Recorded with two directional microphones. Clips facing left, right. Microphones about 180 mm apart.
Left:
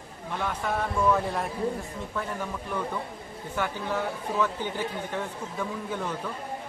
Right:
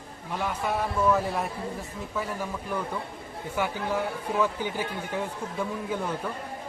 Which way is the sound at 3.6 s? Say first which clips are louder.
Right 1 dB; 10° right (ahead or behind).